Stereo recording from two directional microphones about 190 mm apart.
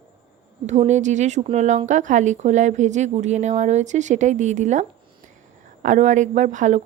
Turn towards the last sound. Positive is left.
turn(degrees=-40)  # may be behind; listen again after turning